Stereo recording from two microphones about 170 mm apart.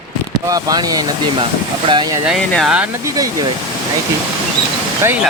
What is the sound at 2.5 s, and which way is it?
Speech, centre (ahead or behind).